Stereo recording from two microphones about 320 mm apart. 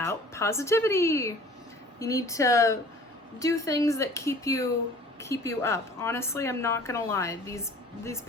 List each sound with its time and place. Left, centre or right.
0.0 s a woman's voice: centre